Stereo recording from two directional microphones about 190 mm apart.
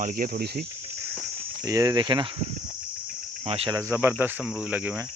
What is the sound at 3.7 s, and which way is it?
Cricket, 15° right (ahead or behind).